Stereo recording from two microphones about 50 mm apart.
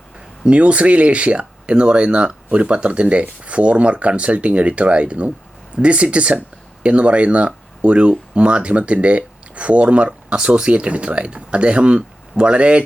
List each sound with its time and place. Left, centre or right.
0.4 s speech: right